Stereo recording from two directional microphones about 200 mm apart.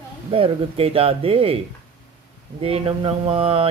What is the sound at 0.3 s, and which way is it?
Speech, 30° right (ahead or behind).